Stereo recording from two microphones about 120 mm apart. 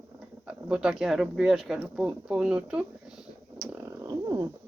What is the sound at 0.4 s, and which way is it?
Speech, 5° right (ahead or behind).